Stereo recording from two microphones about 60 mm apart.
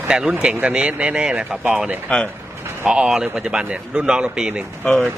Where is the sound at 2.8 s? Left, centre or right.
Centre.